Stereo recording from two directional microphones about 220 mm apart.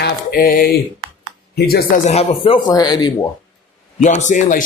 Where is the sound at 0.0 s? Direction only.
45° left (ahead or behind).